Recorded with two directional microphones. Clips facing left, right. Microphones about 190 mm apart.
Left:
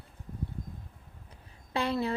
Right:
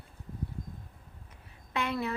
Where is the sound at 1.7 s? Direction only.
30° left (ahead or behind).